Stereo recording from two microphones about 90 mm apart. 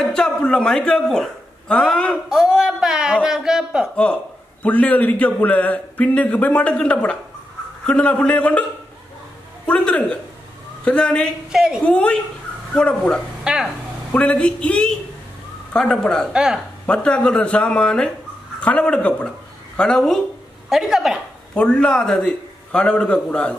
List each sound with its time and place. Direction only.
0.0 s a man's voice: 10° left (ahead or behind)
2.2 s speech: 5° right (ahead or behind)
3.9 s speech: 10° left (ahead or behind)
9.7 s speech: 15° left (ahead or behind)
11.5 s speech: 5° right (ahead or behind)
11.8 s speech: 15° left (ahead or behind)
13.4 s speech: 5° right (ahead or behind)
14.1 s speech: 15° left (ahead or behind)
16.3 s speech: 5° right (ahead or behind)
16.8 s speech: 10° left (ahead or behind)
20.7 s a woman's voice: 5° right (ahead or behind)
21.5 s speech: 10° left (ahead or behind)